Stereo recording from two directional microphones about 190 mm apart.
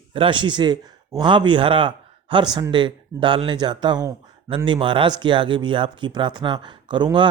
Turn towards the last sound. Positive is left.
turn(degrees=-25)  # may be behind; listen again after turning